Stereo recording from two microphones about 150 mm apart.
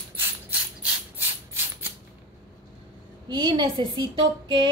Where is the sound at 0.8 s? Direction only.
15° right (ahead or behind).